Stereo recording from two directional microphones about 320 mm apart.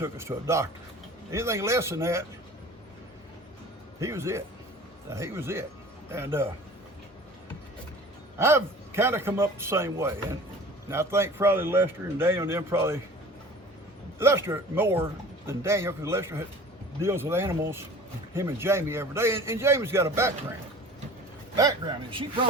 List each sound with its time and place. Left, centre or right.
0.0 s speech: centre
4.0 s speech: centre
8.4 s speech: centre
14.2 s speech: centre
21.5 s speech: centre